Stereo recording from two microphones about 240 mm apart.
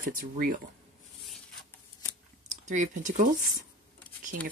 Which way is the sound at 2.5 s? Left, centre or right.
Right.